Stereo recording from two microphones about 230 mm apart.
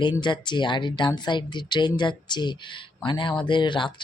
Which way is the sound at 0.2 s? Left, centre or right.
Centre.